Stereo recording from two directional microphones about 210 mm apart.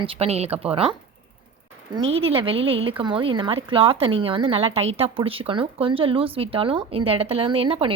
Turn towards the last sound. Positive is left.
turn(degrees=-25)  # may be behind; listen again after turning